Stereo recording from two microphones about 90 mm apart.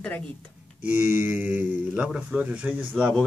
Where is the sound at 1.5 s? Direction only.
20° right (ahead or behind).